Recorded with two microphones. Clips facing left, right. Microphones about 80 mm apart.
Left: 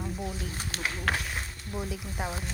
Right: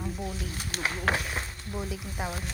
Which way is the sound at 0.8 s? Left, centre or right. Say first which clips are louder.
Right 3 dB; right.